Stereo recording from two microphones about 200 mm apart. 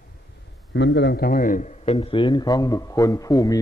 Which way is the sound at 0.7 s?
60° left (ahead or behind).